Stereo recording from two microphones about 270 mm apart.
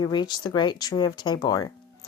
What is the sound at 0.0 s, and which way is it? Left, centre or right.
Speech, centre.